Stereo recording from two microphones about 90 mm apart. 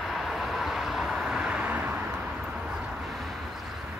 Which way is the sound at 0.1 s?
Centre (ahead or behind).